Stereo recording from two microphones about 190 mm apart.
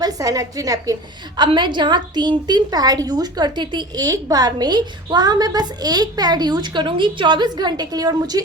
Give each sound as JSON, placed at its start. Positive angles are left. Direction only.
{"t": 0.0, "sound": "a woman's voice", "side_deg": -20}